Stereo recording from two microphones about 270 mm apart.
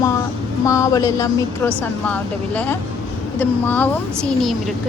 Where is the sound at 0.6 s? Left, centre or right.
Centre.